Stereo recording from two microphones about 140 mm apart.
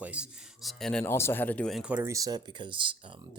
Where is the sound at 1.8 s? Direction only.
10° right (ahead or behind).